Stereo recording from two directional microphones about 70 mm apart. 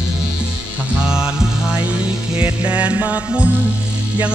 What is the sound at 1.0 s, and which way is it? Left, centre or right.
Music, centre.